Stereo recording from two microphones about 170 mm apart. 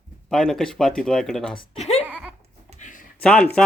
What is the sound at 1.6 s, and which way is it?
Speech, 40° left (ahead or behind).